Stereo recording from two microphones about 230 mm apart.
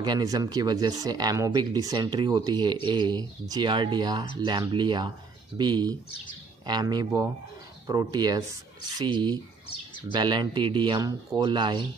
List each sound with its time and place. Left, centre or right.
0.0 s speech: centre